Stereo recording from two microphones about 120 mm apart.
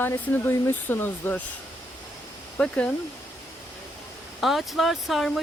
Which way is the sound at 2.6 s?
10° left (ahead or behind).